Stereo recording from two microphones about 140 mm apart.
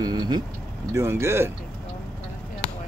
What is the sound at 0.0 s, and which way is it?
Speech, 30° right (ahead or behind).